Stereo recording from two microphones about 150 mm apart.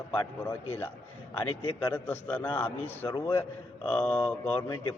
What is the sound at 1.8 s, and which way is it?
A man's voice, 15° left (ahead or behind).